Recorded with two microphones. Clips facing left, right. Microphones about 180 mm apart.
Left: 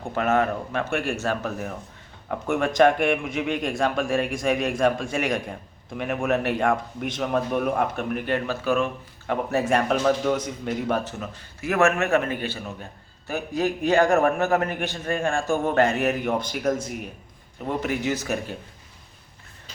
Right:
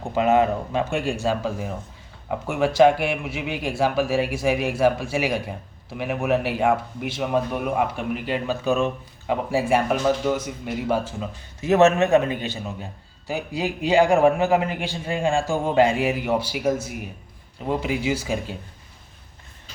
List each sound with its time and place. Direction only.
0.1 s speech: 15° right (ahead or behind)
11.6 s speech: 20° right (ahead or behind)